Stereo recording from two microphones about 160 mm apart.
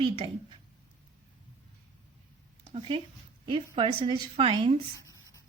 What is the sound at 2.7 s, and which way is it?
A woman's voice, 35° right (ahead or behind).